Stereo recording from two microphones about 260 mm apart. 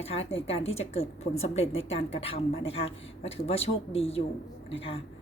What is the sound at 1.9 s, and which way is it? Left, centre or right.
A woman's voice, left.